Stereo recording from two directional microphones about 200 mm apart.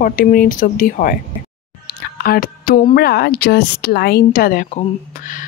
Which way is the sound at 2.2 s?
50° left (ahead or behind).